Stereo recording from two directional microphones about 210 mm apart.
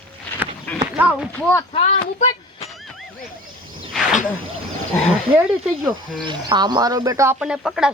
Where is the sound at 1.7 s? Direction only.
35° left (ahead or behind).